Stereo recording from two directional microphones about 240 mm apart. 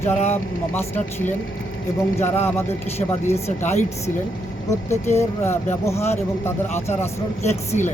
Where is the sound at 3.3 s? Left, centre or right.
Left.